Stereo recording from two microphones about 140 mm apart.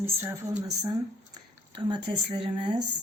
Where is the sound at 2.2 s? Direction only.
40° right (ahead or behind).